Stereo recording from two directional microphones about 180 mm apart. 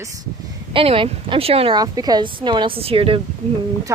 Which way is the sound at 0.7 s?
30° right (ahead or behind).